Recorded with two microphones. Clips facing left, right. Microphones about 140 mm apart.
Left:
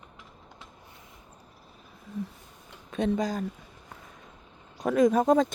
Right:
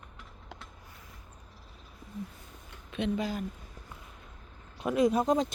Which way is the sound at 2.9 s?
40° left (ahead or behind).